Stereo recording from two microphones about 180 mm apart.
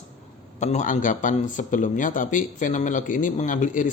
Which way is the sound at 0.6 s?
40° left (ahead or behind).